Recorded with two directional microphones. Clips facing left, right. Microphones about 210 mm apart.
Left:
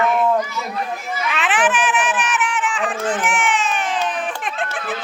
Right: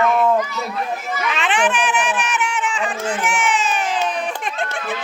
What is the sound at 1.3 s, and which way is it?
Crowd, 5° left (ahead or behind).